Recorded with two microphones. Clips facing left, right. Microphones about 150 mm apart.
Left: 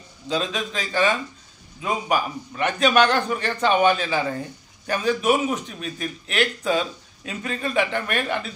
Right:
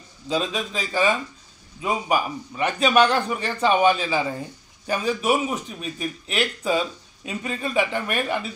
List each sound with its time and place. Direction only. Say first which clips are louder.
0.3 s a man's voice: even; 5° right (ahead or behind)